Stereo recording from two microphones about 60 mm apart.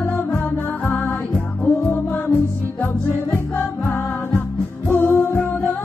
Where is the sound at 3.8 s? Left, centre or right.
Left.